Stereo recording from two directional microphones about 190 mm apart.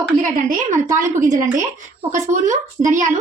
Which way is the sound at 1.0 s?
40° right (ahead or behind).